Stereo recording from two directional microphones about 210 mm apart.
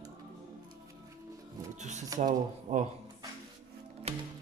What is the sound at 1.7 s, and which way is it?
Music, 35° right (ahead or behind).